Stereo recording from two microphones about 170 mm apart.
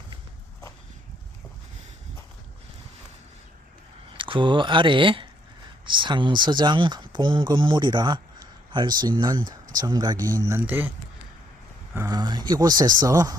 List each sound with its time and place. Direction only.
4.1 s speech: 30° right (ahead or behind)
10.4 s speech: 15° right (ahead or behind)
11.9 s speech: 20° right (ahead or behind)